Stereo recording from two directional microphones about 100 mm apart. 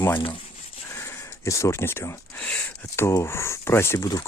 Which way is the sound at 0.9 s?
30° left (ahead or behind).